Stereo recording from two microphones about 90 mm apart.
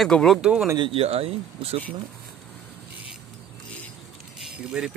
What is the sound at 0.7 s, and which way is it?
Speech, 85° right.